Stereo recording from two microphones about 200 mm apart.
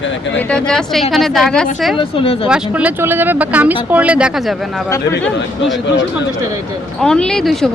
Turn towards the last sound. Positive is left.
turn(degrees=0)  # may be behind; listen again after turning